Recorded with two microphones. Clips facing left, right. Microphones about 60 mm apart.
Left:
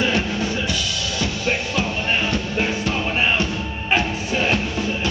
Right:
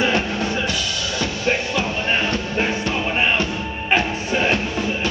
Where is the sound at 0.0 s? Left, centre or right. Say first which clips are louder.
Right 1 dB; centre.